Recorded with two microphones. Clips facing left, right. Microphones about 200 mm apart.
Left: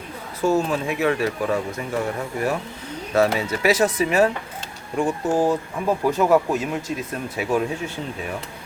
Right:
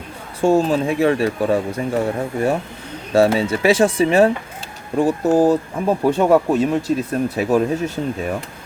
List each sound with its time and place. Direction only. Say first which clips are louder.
0.4 s speech: right 5 dB; 30° right (ahead or behind)